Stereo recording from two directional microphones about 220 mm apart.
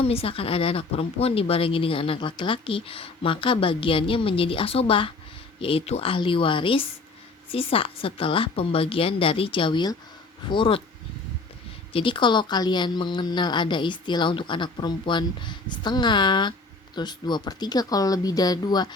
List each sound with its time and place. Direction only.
0.0 s a woman's voice: 25° left (ahead or behind)
11.9 s a woman's voice: 20° left (ahead or behind)